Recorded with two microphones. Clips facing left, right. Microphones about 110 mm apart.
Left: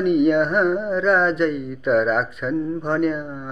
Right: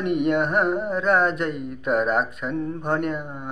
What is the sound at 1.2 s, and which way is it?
Mantra, 50° right (ahead or behind).